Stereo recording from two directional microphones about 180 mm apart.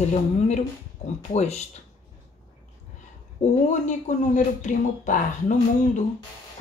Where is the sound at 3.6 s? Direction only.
45° left (ahead or behind).